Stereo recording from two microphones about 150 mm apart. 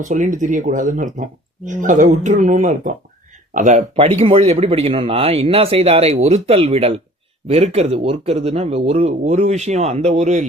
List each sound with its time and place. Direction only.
0.0 s speech: 55° right (ahead or behind)